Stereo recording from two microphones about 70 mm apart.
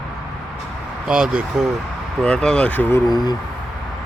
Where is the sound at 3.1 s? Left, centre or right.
Left.